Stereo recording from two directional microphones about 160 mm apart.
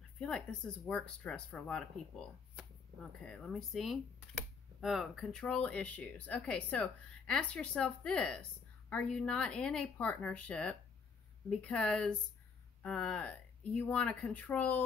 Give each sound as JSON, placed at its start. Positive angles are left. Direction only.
{"t": 0.2, "sound": "speech", "side_deg": 5}
{"t": 3.3, "sound": "speech", "side_deg": 0}